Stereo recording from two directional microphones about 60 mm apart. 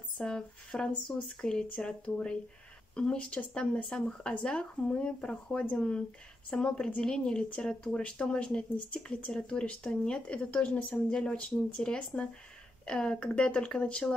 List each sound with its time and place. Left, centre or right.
0.2 s speech: centre